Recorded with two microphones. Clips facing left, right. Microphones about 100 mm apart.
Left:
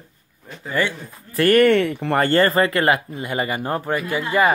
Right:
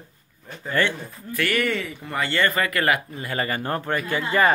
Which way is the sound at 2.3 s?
35° left (ahead or behind).